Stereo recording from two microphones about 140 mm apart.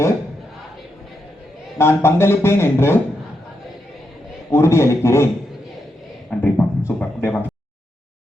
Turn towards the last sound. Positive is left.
turn(degrees=15)  # may be behind; listen again after turning